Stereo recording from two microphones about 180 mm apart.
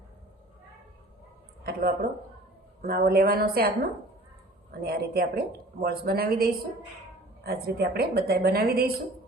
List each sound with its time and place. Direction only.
1.6 s a woman's voice: 55° right (ahead or behind)
4.7 s a woman's voice: 60° right (ahead or behind)